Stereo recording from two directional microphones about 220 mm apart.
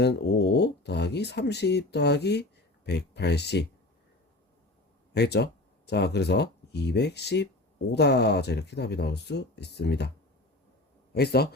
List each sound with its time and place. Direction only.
0.0 s speech: 50° left (ahead or behind)
5.1 s speech: 50° left (ahead or behind)
11.1 s speech: 45° left (ahead or behind)